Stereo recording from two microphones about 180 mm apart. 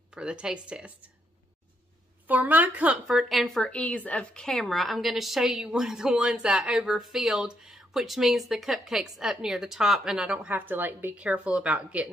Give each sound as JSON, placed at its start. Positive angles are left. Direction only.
{"t": 0.1, "sound": "a woman's voice", "side_deg": -5}
{"t": 2.2, "sound": "a woman's voice", "side_deg": -10}